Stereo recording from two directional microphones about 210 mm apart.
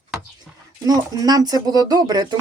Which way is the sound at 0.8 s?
15° right (ahead or behind).